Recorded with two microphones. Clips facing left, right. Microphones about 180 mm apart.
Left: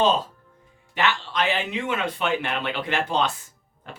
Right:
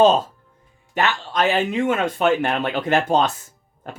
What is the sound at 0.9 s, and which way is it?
Speech, 45° right (ahead or behind).